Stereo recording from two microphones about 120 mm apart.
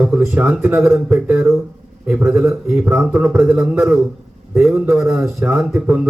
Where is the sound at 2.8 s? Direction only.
10° right (ahead or behind).